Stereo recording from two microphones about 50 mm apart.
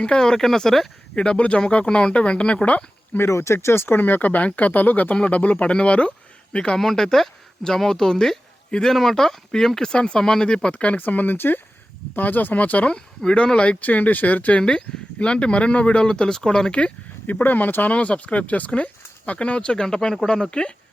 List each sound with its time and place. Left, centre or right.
0.0 s speech: centre
1.1 s speech: left
3.2 s speech: left
6.7 s speech: centre; by 11.0 s left
11.0 s speech: left
12.9 s speech: left
14.6 s speech: centre
17.4 s speech: left
17.8 s speech: left